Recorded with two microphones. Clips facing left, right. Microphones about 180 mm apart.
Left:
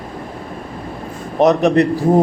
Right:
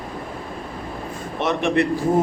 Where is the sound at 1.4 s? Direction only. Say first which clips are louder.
Left 8 dB; 40° left (ahead or behind).